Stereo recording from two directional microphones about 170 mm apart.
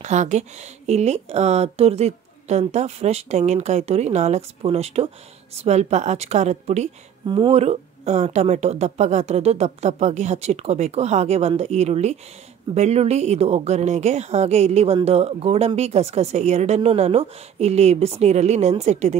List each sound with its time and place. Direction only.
0.0 s speech: 45° right (ahead or behind)
7.2 s speech: 30° right (ahead or behind)